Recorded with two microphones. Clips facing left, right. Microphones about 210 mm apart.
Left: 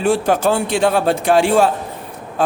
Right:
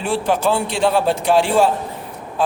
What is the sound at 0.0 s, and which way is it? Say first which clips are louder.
A man's voice: left 3 dB; 45° left (ahead or behind).